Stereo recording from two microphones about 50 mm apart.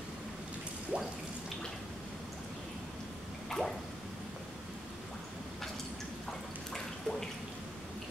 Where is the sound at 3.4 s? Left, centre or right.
Centre.